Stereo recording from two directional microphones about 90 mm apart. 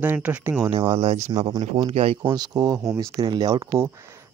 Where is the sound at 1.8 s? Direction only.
90° right.